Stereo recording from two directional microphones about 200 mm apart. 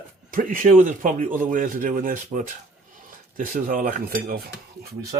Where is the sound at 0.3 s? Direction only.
45° right (ahead or behind).